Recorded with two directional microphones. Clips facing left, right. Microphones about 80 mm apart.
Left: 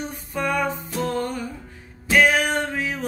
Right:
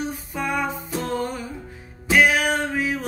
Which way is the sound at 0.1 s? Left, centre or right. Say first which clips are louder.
Left 1 dB; centre.